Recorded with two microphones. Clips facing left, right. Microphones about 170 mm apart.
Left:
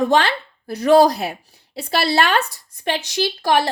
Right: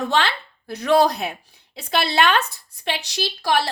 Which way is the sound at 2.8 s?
50° left (ahead or behind).